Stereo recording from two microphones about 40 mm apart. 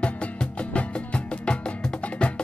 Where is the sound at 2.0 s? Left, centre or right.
Left.